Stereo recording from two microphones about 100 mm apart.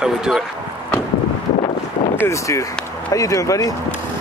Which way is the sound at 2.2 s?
30° left (ahead or behind).